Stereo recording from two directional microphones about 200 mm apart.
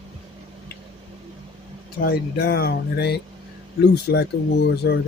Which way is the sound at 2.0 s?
50° left (ahead or behind).